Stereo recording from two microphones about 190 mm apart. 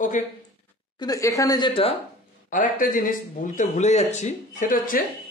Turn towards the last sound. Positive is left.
turn(degrees=45)  # may be behind; listen again after turning